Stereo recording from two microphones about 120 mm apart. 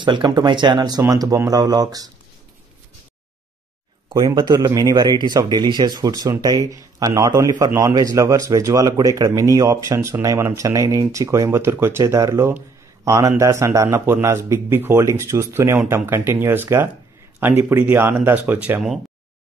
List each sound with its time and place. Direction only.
0.0 s speech: 40° right (ahead or behind)
4.1 s speech: 25° right (ahead or behind)